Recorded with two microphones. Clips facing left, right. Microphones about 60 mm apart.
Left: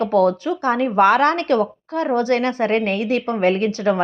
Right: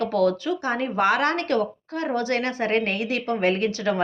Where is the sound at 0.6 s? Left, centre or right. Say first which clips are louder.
Left 8 dB; left.